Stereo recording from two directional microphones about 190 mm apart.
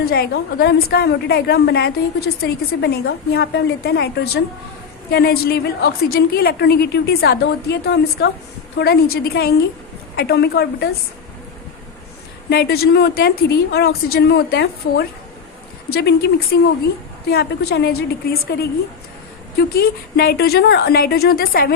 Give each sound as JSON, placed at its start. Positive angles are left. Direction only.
{"t": 0.0, "sound": "a woman's voice", "side_deg": 55}
{"t": 12.5, "sound": "a woman's voice", "side_deg": 55}
{"t": 19.5, "sound": "a woman's voice", "side_deg": 55}